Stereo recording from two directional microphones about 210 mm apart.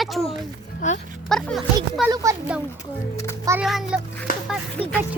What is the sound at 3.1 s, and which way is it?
Speech, 15° left (ahead or behind).